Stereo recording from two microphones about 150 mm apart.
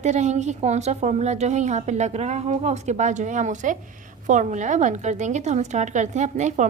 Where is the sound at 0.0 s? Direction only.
50° right (ahead or behind).